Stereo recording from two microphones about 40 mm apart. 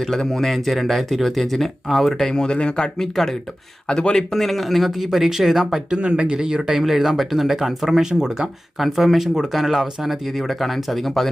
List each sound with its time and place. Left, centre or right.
0.0 s speech: centre
2.3 s speech: centre
3.0 s speech: centre
4.3 s speech: centre
5.9 s speech: right; by 11.3 s centre